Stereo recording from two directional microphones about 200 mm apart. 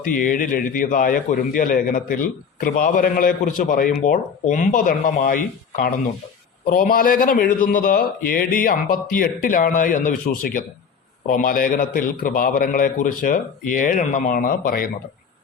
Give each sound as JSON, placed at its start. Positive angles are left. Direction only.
{"t": 0.0, "sound": "a man's voice", "side_deg": 40}